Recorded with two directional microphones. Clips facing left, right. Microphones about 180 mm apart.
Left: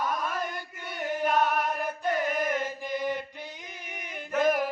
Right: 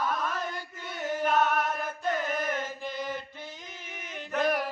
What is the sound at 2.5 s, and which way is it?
Chant, 15° left (ahead or behind).